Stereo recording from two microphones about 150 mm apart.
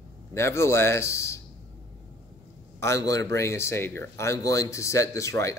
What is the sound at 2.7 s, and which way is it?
A man's voice, 20° left (ahead or behind).